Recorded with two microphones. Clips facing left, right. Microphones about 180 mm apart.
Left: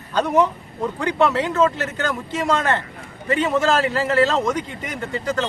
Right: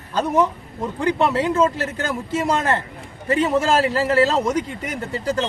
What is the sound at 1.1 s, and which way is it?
Speech, 30° right (ahead or behind).